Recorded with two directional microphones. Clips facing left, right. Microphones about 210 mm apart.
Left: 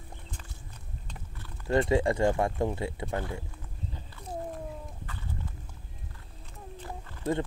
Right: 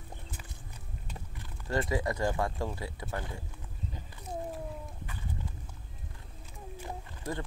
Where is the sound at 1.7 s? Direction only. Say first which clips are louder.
Left 6 dB; 25° left (ahead or behind).